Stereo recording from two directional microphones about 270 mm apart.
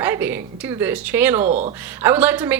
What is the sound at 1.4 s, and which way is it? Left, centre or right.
Speech, right.